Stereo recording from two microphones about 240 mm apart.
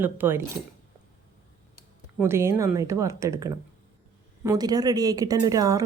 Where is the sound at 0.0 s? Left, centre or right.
Centre.